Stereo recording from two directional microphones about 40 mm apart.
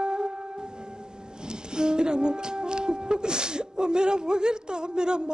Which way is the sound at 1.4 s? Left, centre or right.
Right.